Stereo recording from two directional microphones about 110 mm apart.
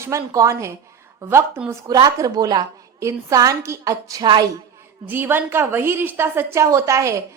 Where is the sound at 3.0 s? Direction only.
25° right (ahead or behind).